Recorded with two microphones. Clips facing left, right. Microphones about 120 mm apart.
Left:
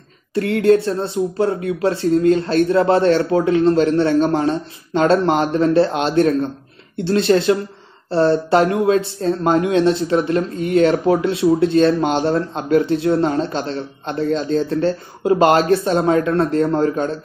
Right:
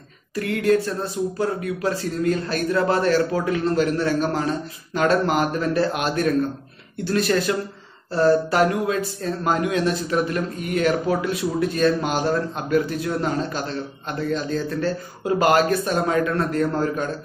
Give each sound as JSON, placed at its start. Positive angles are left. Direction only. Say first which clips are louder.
{"t": 0.3, "sound": "speech", "louder": "left 6 dB", "side_deg": 30}